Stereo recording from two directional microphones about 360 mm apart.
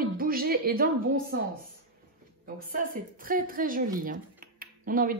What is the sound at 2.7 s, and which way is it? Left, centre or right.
A woman's voice, right.